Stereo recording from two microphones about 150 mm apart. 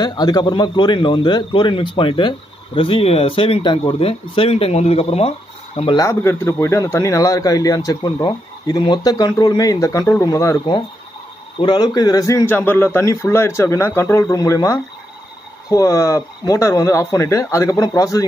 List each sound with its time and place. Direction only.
0.0 s a man's voice: 25° left (ahead or behind); by 5.3 s 40° left (ahead or behind)
5.9 s a man's voice: 20° left (ahead or behind)
11.6 s a man's voice: 30° left (ahead or behind)